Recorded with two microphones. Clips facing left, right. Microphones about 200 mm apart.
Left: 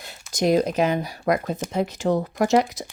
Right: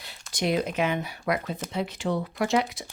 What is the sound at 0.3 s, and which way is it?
Speech, 40° left (ahead or behind).